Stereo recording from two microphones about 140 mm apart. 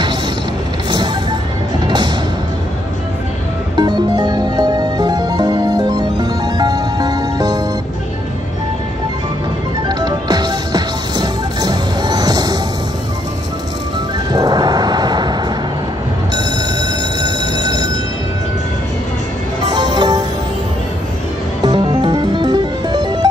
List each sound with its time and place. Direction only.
0.8 s music: 30° right (ahead or behind)
3.7 s music: 30° right (ahead or behind)
9.8 s music: 30° right (ahead or behind)
14.3 s a sound: 30° right (ahead or behind)
16.3 s train: 30° right (ahead or behind)
19.7 s music: 30° right (ahead or behind)
21.6 s music: 35° right (ahead or behind)